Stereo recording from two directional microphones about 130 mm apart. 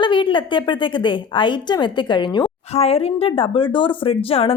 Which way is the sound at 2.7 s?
50° left (ahead or behind).